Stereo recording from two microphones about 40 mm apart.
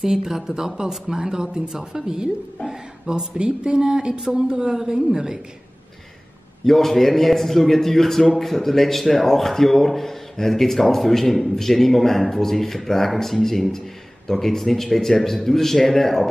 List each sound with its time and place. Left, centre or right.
0.0 s a woman's voice: centre
6.6 s a man's voice: centre